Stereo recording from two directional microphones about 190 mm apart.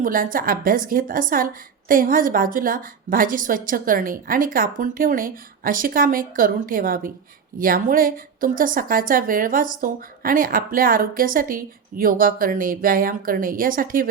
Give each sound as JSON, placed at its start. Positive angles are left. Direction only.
{"t": 0.0, "sound": "a woman's voice", "side_deg": -45}